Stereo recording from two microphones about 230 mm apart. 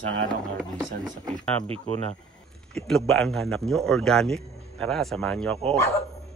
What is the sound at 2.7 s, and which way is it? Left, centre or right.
Speech, centre.